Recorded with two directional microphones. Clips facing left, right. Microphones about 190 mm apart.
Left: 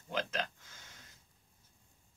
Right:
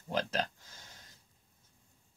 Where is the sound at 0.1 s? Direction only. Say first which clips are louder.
Right 3 dB; 35° right (ahead or behind).